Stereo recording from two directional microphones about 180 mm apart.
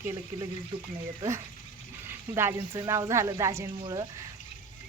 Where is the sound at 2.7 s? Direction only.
15° right (ahead or behind).